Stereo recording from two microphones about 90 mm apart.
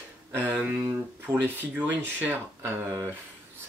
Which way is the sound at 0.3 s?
20° right (ahead or behind).